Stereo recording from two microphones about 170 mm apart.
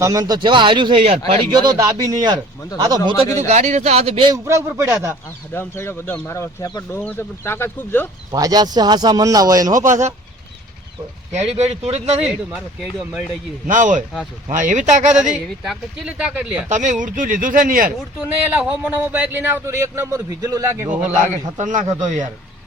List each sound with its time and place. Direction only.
0.0 s speech: 20° right (ahead or behind)
1.5 s speech: 20° right (ahead or behind)
3.3 s speech: 40° right (ahead or behind)
4.4 s speech: 15° right (ahead or behind)
5.5 s speech: 15° left (ahead or behind)
8.3 s speech: 20° right (ahead or behind)
9.7 s speech: 50° right (ahead or behind)
11.3 s speech: 40° right (ahead or behind)
12.3 s speech: 5° right (ahead or behind)
13.7 s speech: 50° right (ahead or behind)
15.3 s speech: 5° right (ahead or behind)
16.6 s speech: 45° right (ahead or behind)
18.2 s speech: 5° right (ahead or behind)
21.0 s speech: 45° right (ahead or behind)